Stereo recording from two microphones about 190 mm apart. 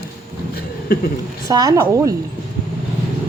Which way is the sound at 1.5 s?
20° right (ahead or behind).